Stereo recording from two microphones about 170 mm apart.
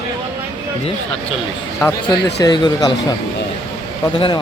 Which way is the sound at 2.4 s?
25° left (ahead or behind).